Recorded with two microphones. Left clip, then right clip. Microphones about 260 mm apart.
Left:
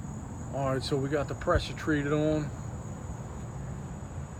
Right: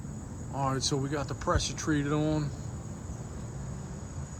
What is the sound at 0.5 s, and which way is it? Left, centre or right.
Speech, centre.